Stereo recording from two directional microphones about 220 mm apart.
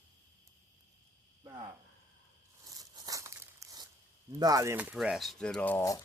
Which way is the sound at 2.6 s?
15° right (ahead or behind).